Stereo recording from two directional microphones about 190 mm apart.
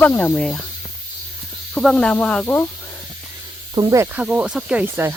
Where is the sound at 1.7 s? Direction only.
Centre (ahead or behind).